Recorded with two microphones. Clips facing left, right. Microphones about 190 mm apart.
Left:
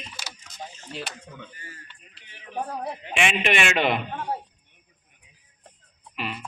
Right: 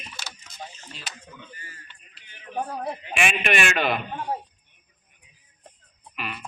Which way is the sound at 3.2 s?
25° left (ahead or behind).